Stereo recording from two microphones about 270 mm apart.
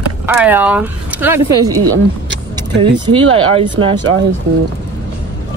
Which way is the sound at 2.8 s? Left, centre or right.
Centre.